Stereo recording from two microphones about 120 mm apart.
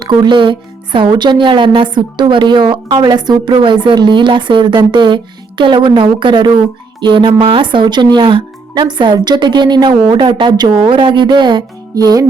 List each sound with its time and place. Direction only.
0.0 s a woman's voice: 35° right (ahead or behind)